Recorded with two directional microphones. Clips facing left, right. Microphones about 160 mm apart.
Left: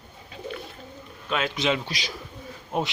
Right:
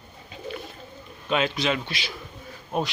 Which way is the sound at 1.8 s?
40° left (ahead or behind).